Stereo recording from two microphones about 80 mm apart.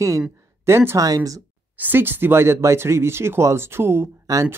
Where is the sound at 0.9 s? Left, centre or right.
Right.